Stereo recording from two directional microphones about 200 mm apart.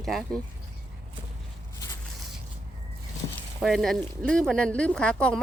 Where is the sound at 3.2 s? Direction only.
25° left (ahead or behind).